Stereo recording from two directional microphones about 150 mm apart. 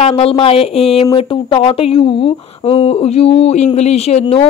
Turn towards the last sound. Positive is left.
turn(degrees=40)  # may be behind; listen again after turning